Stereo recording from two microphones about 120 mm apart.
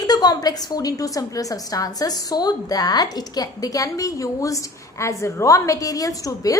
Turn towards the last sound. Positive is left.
turn(degrees=30)  # may be behind; listen again after turning